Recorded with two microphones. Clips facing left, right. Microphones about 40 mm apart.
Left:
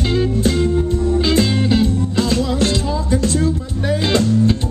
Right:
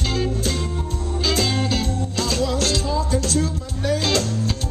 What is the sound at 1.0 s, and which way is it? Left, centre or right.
Music, left.